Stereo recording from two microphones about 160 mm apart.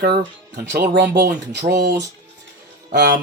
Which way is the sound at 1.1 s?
90° right.